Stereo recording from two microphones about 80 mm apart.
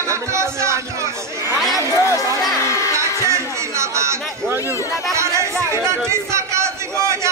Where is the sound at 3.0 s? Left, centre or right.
Right.